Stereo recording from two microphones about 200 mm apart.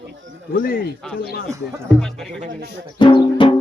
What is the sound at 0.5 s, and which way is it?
Speech, 45° left (ahead or behind).